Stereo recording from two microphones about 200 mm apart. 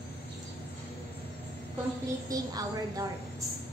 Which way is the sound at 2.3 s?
15° right (ahead or behind).